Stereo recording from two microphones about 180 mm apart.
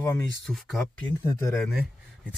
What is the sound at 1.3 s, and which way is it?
Speech, 15° left (ahead or behind).